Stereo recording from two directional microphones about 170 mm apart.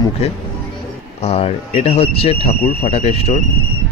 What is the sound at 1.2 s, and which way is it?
A man's voice, 40° left (ahead or behind).